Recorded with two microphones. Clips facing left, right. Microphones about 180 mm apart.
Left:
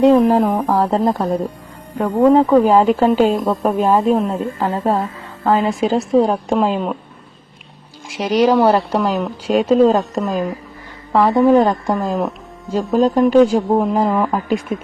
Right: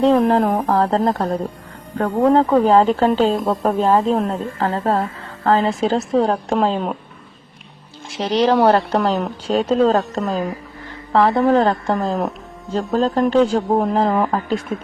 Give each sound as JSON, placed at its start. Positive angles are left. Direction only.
{"t": 0.0, "sound": "speech", "side_deg": 10}
{"t": 3.3, "sound": "a woman's voice", "side_deg": -5}
{"t": 3.6, "sound": "speech", "side_deg": 10}
{"t": 8.0, "sound": "speech", "side_deg": 10}
{"t": 11.1, "sound": "speech", "side_deg": 15}
{"t": 11.9, "sound": "speech", "side_deg": 0}
{"t": 12.9, "sound": "speech", "side_deg": 15}
{"t": 14.1, "sound": "speech", "side_deg": -5}
{"t": 14.3, "sound": "speech", "side_deg": 10}